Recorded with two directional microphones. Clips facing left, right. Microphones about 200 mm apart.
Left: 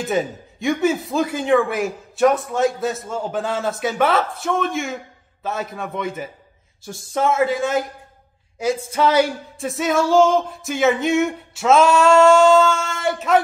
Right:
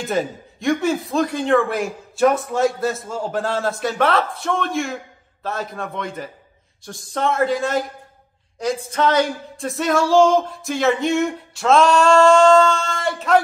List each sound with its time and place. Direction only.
0.1 s singing: centre (ahead or behind)